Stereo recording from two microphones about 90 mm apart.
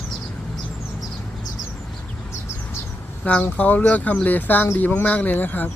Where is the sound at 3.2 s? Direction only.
15° left (ahead or behind).